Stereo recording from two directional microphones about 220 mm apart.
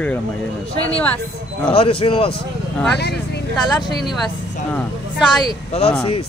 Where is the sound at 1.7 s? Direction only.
25° left (ahead or behind).